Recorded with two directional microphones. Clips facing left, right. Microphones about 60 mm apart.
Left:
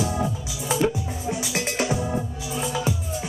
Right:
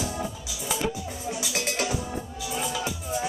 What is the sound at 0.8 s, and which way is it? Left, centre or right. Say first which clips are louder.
Music: left 5 dB; centre.